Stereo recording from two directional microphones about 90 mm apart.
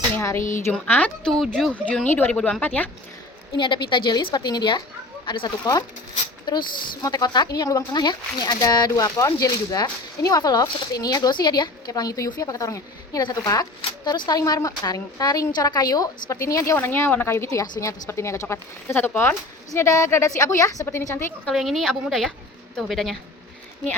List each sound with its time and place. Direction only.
0.2 s speech: 35° left (ahead or behind)
0.7 s speech: 15° left (ahead or behind)
1.3 s a woman's voice: 5° left (ahead or behind)
1.7 s speech: 15° left (ahead or behind)
3.6 s a woman's voice: 65° left (ahead or behind); by 21.3 s 30° left (ahead or behind)
21.5 s a woman's voice: centre (ahead or behind)